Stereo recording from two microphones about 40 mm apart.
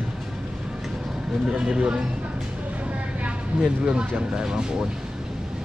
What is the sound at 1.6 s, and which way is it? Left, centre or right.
Speech, right.